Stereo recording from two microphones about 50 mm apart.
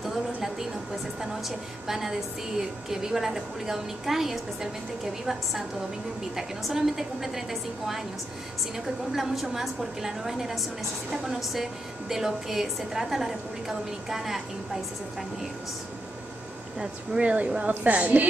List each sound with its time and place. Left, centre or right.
0.0 s a sound: centre
1.9 s a woman's voice: centre
16.8 s a woman's voice: centre